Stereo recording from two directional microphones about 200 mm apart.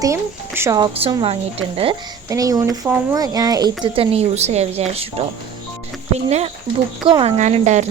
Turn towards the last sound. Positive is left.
turn(degrees=-35)  # may be behind; listen again after turning